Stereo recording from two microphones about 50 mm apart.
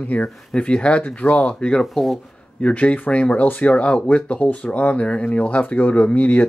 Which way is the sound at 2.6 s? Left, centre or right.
Left.